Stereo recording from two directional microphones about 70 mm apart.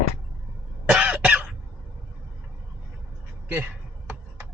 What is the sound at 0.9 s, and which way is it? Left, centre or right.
Cough, centre.